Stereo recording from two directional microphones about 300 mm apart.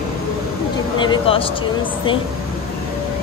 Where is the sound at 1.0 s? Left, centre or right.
Centre.